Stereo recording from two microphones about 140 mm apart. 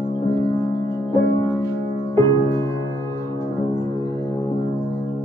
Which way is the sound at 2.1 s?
20° left (ahead or behind).